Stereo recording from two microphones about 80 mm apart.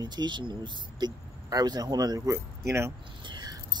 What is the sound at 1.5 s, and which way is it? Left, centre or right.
Speech, right.